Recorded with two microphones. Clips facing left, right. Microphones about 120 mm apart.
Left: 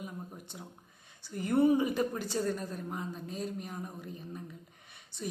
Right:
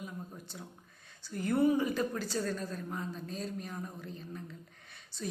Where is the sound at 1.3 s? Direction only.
15° left (ahead or behind).